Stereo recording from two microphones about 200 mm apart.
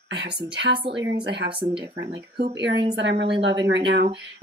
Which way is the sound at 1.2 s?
60° right (ahead or behind).